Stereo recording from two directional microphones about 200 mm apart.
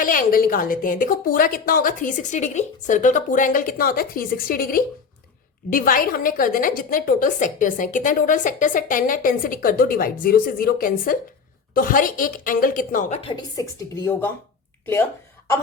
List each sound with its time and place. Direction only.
0.0 s a woman's voice: 45° left (ahead or behind); by 14.3 s 10° left (ahead or behind)